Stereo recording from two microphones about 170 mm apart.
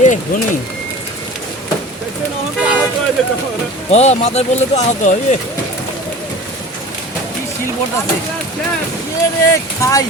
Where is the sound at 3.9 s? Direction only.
40° left (ahead or behind).